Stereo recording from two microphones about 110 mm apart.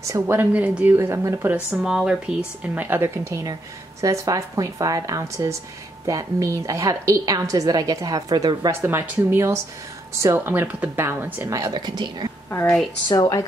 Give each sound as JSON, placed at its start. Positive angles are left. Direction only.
{"t": 0.0, "sound": "a woman's voice", "side_deg": -30}
{"t": 0.4, "sound": "speech", "side_deg": -15}
{"t": 0.9, "sound": "a woman's voice", "side_deg": -25}
{"t": 8.8, "sound": "a woman's voice", "side_deg": -20}
{"t": 11.5, "sound": "a woman's voice", "side_deg": -35}
{"t": 13.1, "sound": "speech", "side_deg": 35}